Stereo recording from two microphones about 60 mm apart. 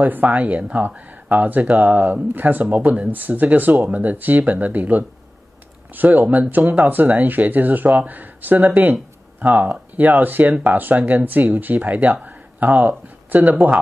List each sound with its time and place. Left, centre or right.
0.0 s speech: right